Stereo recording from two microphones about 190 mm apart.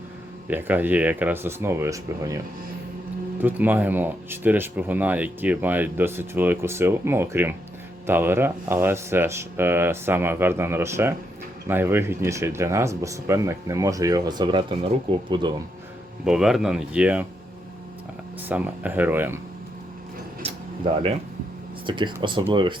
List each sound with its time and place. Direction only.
0.4 s speech: 10° right (ahead or behind)
16.2 s speech: 5° right (ahead or behind)
18.4 s speech: 10° right (ahead or behind)
21.8 s speech: 25° right (ahead or behind)